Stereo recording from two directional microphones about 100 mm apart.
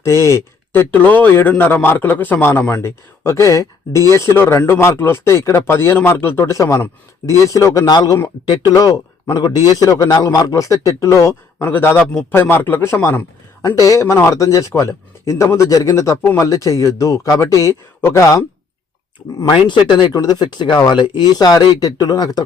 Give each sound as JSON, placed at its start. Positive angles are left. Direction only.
{"t": 0.0, "sound": "speech", "side_deg": 30}
{"t": 9.3, "sound": "speech", "side_deg": 45}
{"t": 19.4, "sound": "speech", "side_deg": 50}